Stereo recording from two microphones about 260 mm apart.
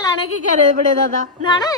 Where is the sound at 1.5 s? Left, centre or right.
Centre.